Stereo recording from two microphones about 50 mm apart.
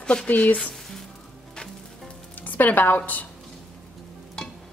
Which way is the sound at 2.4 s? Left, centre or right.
Left.